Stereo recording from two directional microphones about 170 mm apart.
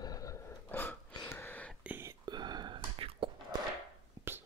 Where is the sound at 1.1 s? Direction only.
20° left (ahead or behind).